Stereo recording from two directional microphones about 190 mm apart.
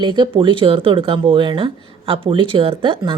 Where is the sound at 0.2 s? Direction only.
25° right (ahead or behind).